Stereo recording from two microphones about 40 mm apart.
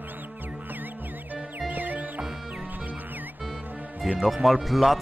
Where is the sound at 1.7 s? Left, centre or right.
Right.